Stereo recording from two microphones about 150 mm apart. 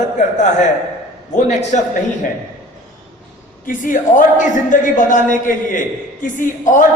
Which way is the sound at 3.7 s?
65° left (ahead or behind).